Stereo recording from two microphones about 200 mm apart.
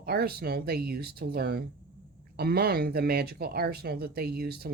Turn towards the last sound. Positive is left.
turn(degrees=-50)  # may be behind; listen again after turning